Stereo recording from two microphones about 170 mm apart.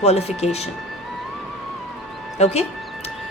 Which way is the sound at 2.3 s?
40° left (ahead or behind).